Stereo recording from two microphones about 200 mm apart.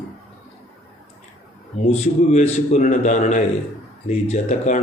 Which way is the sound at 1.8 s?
35° left (ahead or behind).